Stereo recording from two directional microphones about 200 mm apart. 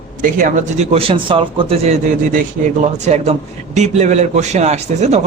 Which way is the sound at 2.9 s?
35° right (ahead or behind).